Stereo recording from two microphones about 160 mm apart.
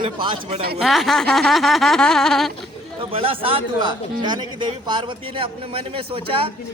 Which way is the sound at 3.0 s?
35° right (ahead or behind).